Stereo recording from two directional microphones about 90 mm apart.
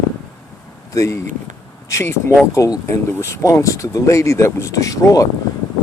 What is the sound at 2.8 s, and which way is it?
Speech, 30° left (ahead or behind).